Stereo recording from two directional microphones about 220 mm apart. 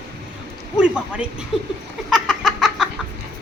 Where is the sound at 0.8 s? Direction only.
5° right (ahead or behind).